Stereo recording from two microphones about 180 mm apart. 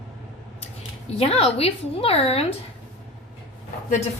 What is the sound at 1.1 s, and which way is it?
A woman's voice, 35° left (ahead or behind).